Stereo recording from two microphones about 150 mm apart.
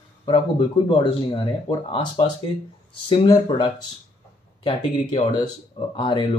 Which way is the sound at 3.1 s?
30° left (ahead or behind).